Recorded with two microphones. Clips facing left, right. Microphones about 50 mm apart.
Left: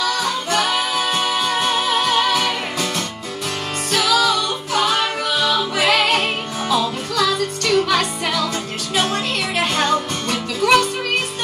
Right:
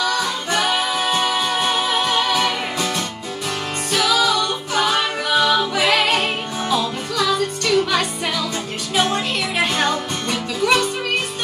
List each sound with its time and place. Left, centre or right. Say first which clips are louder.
0.0 s music: even; centre
3.9 s music: left 1 dB; centre
5.3 s music: right 4 dB; centre
5.8 s music: left 1 dB; centre